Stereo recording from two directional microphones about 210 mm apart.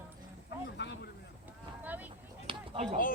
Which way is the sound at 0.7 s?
55° left (ahead or behind).